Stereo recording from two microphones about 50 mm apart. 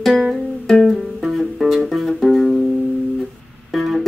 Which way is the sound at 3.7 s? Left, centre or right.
Centre.